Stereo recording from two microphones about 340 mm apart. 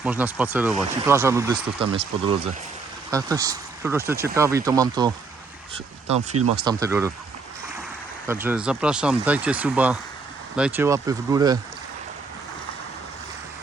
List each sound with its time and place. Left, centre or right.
0.0 s speech: centre
8.3 s speech: centre